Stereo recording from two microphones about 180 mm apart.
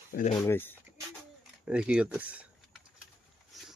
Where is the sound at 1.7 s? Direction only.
5° right (ahead or behind).